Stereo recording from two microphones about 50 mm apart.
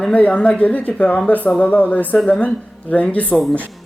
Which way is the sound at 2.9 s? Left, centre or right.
Left.